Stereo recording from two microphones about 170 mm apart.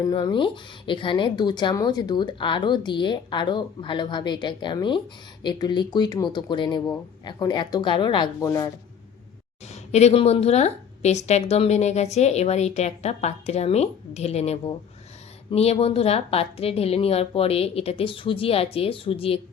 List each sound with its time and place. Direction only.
0.0 s speech: 25° left (ahead or behind)
9.9 s a woman's voice: 40° left (ahead or behind)